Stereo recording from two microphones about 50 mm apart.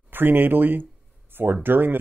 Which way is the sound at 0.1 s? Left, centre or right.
Right.